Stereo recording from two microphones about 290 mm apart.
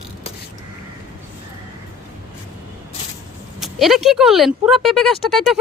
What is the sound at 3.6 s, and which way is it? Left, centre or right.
Speech, centre.